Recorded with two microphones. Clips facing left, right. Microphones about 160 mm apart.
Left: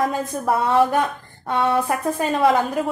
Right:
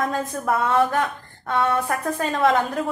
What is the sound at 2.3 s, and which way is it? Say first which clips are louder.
Speech: left 2 dB; 5° left (ahead or behind).